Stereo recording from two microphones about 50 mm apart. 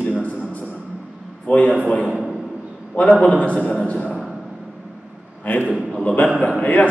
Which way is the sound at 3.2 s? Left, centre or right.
Left.